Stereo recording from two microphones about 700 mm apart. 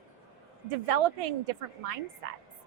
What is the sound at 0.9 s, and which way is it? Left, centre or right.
Speech, right.